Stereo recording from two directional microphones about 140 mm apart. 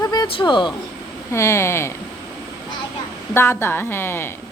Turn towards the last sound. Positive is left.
turn(degrees=15)  # may be behind; listen again after turning